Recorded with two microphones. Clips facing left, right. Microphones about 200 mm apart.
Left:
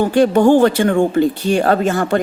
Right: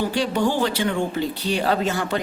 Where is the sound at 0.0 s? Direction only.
50° left (ahead or behind).